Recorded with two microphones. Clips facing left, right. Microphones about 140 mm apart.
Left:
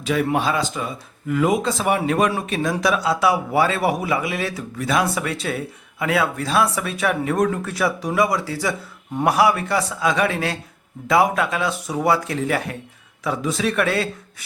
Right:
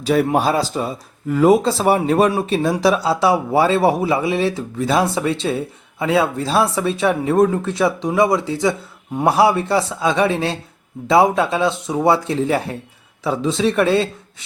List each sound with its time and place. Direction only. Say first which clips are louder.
0.0 s a man's voice: right 4 dB; 35° right (ahead or behind)